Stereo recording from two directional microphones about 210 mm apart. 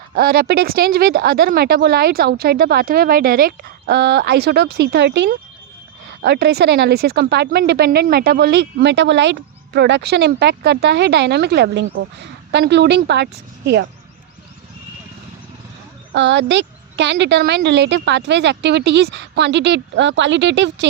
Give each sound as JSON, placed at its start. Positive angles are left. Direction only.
{"t": 0.1, "sound": "a woman's voice", "side_deg": -45}
{"t": 16.1, "sound": "speech", "side_deg": -55}